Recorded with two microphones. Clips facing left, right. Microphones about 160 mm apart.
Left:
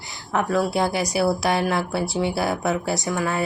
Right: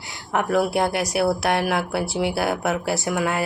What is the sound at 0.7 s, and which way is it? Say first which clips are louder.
Speech: even; centre (ahead or behind).